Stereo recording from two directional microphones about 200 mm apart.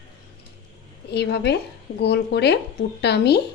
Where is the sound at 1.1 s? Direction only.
55° left (ahead or behind).